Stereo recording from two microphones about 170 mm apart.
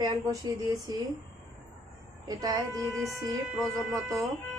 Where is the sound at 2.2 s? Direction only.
20° right (ahead or behind).